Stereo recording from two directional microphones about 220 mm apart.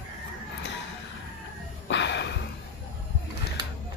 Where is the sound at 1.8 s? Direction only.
50° left (ahead or behind).